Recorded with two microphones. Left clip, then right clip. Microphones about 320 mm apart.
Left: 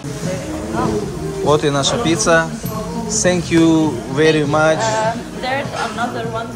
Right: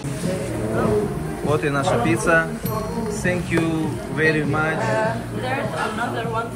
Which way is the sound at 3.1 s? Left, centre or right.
Centre.